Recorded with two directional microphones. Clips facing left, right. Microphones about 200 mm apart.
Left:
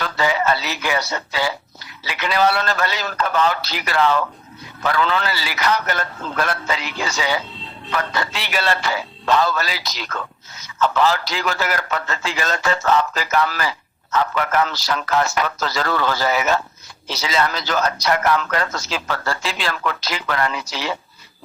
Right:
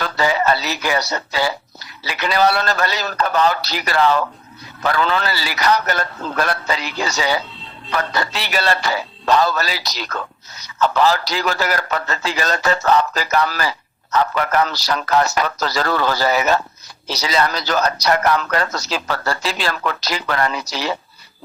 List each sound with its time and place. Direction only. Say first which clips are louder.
0.0 s a man's voice: right 2 dB; 40° right (ahead or behind)